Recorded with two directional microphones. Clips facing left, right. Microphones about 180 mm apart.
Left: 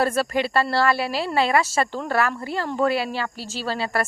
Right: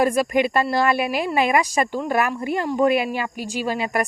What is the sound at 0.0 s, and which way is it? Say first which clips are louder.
Speech: right 3 dB; 15° right (ahead or behind).